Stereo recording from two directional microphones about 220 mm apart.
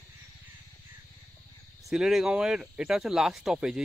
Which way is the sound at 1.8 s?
Centre (ahead or behind).